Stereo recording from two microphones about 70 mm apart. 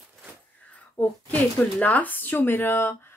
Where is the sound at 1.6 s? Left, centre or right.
Left.